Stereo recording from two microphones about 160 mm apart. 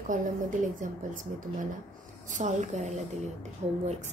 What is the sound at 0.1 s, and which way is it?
A woman's voice, 55° right (ahead or behind).